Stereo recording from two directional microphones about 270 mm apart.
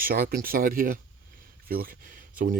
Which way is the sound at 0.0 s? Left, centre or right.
Right.